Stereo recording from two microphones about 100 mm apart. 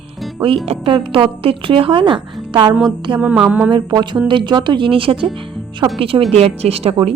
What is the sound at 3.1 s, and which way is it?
Music, 10° right (ahead or behind).